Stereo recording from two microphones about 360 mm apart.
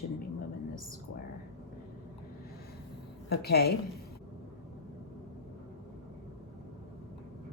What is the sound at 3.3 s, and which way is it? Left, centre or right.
Speech, left.